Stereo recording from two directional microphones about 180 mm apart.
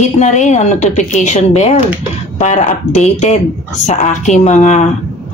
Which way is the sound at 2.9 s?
40° left (ahead or behind).